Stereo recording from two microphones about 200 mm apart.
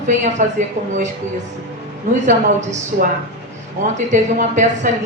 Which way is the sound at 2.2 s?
35° right (ahead or behind).